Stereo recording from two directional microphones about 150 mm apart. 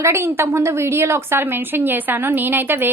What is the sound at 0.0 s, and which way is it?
A woman's voice, 15° right (ahead or behind).